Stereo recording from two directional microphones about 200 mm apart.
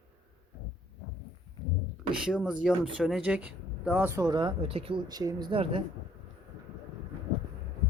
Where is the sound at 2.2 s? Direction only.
5° right (ahead or behind); by 5.8 s 25° right (ahead or behind).